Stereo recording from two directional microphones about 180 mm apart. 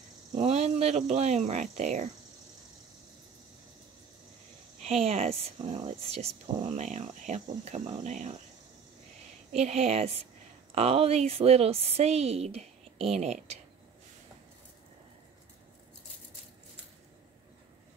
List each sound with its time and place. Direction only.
0.4 s a woman's voice: 35° right (ahead or behind)
4.8 s a woman's voice: 35° right (ahead or behind)
9.5 s a woman's voice: 35° right (ahead or behind)